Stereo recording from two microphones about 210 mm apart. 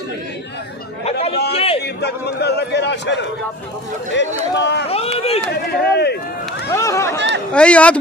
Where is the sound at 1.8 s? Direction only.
50° left (ahead or behind).